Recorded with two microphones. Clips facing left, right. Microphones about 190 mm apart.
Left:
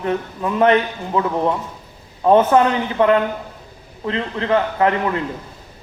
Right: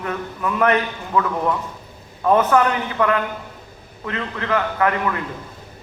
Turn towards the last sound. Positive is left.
turn(degrees=25)  # may be behind; listen again after turning